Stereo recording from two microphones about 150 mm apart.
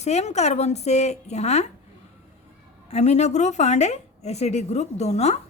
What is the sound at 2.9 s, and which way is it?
Speech, 50° left (ahead or behind).